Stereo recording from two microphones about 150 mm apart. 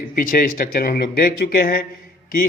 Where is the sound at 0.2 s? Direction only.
70° left (ahead or behind).